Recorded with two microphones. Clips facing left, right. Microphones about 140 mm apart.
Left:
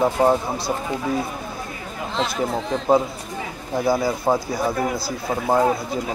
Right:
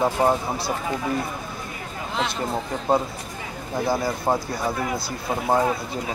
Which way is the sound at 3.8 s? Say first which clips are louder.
Left 4 dB; 10° left (ahead or behind).